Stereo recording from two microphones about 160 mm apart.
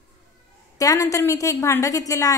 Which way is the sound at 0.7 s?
20° left (ahead or behind).